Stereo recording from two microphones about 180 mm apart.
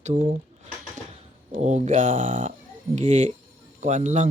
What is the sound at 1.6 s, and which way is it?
Speech, 40° right (ahead or behind).